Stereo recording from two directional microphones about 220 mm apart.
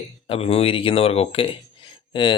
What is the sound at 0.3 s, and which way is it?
Speech, 25° left (ahead or behind).